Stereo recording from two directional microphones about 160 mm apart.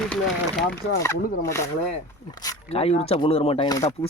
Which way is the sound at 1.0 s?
15° left (ahead or behind).